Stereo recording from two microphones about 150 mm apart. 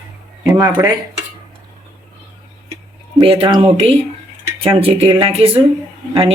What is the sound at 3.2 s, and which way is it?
Speech, 35° right (ahead or behind).